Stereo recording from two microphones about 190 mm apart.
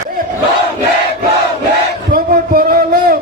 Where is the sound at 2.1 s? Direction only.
50° right (ahead or behind).